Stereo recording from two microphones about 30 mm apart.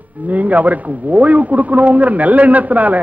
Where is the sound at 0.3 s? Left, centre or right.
Right.